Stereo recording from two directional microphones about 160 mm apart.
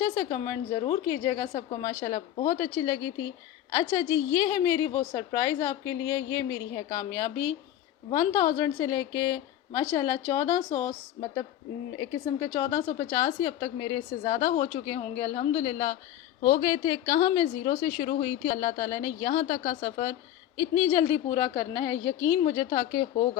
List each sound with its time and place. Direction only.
0.0 s a woman's voice: 20° left (ahead or behind)
12.4 s a woman's voice: 20° left (ahead or behind)